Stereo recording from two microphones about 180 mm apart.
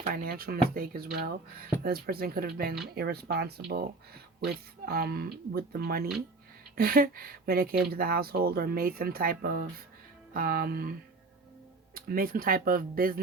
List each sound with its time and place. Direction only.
0.1 s speech: 55° right (ahead or behind)
11.9 s speech: 55° right (ahead or behind)